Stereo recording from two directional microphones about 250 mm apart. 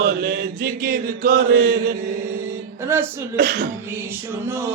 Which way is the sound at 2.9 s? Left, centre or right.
Centre.